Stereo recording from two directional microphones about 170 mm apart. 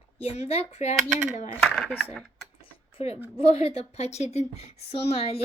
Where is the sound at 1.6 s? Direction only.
5° left (ahead or behind).